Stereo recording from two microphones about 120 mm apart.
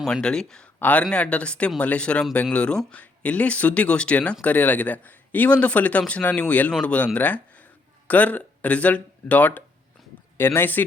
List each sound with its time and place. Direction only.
0.0 s speech: 5° left (ahead or behind)
10.0 s a sound: centre (ahead or behind)
10.3 s speech: 20° left (ahead or behind)